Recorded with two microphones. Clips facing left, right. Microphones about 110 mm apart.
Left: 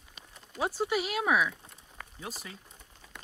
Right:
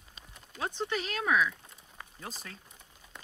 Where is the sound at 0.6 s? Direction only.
10° left (ahead or behind).